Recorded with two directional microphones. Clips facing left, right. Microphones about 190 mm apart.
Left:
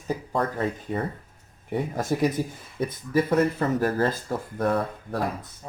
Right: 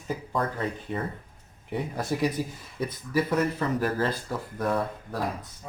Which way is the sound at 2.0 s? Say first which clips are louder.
Left 3 dB; 45° left (ahead or behind).